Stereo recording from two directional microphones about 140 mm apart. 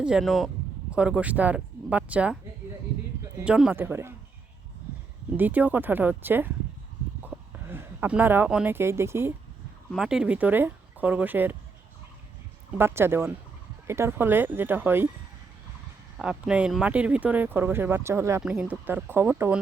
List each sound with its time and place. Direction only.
0.0 s speech: 5° right (ahead or behind)
3.4 s speech: 5° right (ahead or behind)
5.4 s speech: 10° right (ahead or behind)
7.2 s a sound: 15° right (ahead or behind)
8.7 s speech: 20° right (ahead or behind)
9.9 s speech: 5° right (ahead or behind)
12.7 s speech: 15° right (ahead or behind)
16.1 s speech: 5° right (ahead or behind)
18.4 s speech: 5° right (ahead or behind)